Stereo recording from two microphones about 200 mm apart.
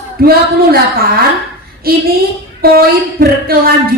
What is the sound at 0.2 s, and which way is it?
Speech, 50° right (ahead or behind).